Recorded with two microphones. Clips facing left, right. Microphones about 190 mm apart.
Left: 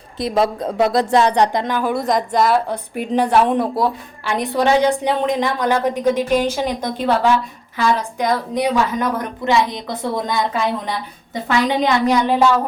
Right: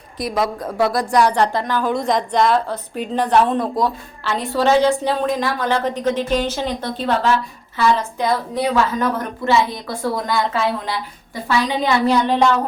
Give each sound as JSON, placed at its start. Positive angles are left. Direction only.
{"t": 0.2, "sound": "a woman's voice", "side_deg": 25}
{"t": 2.6, "sound": "a woman's voice", "side_deg": 15}